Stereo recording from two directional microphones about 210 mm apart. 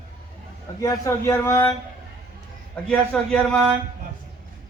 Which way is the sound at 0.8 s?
15° left (ahead or behind).